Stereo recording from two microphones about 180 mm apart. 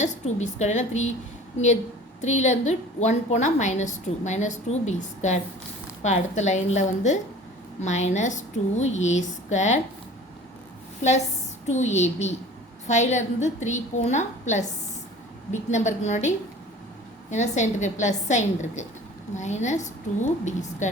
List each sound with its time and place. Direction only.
0.0 s a woman's voice: 40° left (ahead or behind)
11.7 s a woman's voice: 40° left (ahead or behind)
17.3 s a woman's voice: 40° left (ahead or behind)